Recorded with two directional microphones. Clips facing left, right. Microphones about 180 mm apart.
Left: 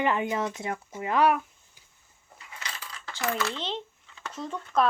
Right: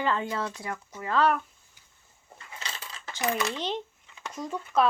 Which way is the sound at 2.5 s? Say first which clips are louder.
Even; 25° right (ahead or behind).